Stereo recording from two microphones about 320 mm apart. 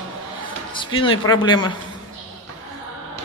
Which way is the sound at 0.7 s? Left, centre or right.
Centre.